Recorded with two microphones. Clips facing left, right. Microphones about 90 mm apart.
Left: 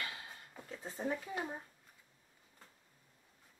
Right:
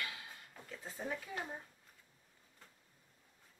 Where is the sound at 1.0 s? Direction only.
10° left (ahead or behind).